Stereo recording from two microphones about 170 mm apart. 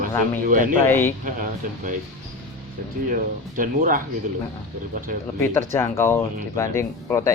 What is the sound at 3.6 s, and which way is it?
Speech, 55° right (ahead or behind).